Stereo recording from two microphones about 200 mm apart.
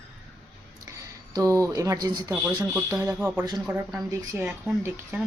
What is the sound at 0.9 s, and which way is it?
Speech, 15° right (ahead or behind).